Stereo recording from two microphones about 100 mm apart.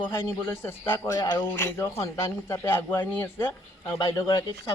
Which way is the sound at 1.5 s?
25° left (ahead or behind).